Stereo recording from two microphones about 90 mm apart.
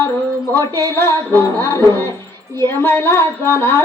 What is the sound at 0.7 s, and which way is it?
Music, 30° left (ahead or behind).